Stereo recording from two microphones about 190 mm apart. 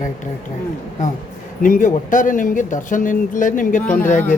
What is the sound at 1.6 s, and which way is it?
A man's voice, 45° left (ahead or behind).